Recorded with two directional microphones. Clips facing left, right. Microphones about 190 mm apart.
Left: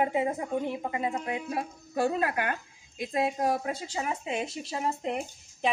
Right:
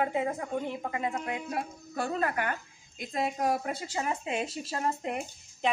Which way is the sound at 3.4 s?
Centre (ahead or behind).